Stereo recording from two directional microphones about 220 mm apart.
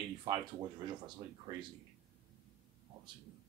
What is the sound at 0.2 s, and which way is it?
Speech, 20° right (ahead or behind).